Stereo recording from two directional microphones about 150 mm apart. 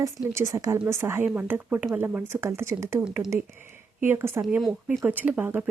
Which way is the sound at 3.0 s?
5° right (ahead or behind).